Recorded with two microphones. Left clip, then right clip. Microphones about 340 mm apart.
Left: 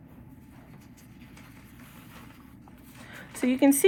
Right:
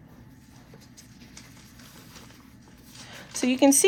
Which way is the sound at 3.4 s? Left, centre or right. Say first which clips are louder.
Right 2 dB; right.